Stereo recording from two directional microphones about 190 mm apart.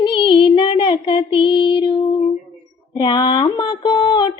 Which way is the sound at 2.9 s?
25° left (ahead or behind).